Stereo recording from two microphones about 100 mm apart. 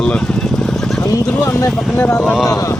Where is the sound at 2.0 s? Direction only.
20° left (ahead or behind).